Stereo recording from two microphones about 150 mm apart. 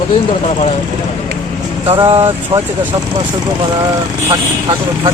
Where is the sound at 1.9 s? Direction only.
40° right (ahead or behind).